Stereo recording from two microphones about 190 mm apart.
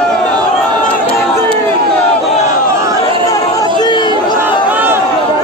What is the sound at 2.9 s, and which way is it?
Chatter, 20° left (ahead or behind).